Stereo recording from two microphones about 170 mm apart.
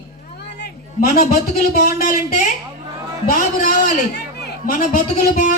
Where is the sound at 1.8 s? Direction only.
55° left (ahead or behind).